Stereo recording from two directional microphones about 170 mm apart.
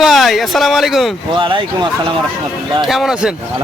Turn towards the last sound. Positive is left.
turn(degrees=-5)  # may be behind; listen again after turning